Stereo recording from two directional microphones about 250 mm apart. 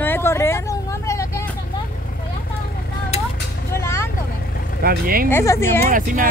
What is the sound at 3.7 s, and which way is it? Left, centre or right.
Vehicle, centre.